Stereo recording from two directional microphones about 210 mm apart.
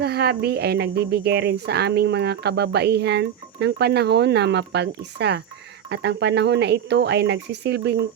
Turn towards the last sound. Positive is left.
turn(degrees=-55)  # may be behind; listen again after turning